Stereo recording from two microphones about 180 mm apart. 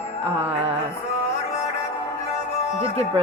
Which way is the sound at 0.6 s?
35° right (ahead or behind).